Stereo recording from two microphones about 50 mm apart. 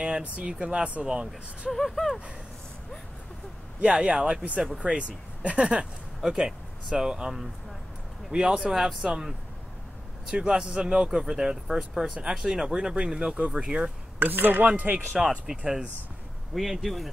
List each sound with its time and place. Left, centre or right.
0.0 s speech: right
1.7 s speech: centre
4.0 s speech: right
10.5 s speech: centre
14.2 s speech: right
15.1 s speech: centre
16.5 s speech: centre